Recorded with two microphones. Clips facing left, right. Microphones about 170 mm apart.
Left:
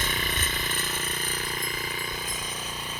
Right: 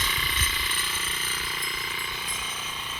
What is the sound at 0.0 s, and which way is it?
Jackhammer, 50° left (ahead or behind).